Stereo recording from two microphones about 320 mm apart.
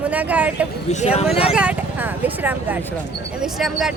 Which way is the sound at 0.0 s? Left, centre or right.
Centre.